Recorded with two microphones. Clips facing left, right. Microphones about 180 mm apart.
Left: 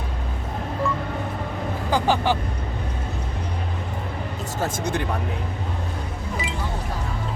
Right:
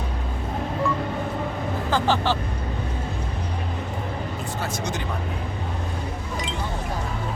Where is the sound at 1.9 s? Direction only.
15° left (ahead or behind).